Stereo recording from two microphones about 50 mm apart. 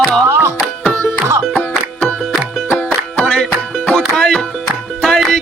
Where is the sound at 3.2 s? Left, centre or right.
Left.